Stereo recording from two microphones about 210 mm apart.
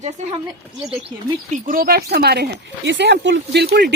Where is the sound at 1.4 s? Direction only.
40° right (ahead or behind).